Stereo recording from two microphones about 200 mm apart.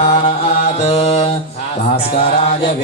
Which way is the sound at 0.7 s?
30° left (ahead or behind).